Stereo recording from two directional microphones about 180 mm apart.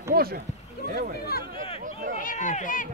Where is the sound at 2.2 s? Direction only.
45° left (ahead or behind).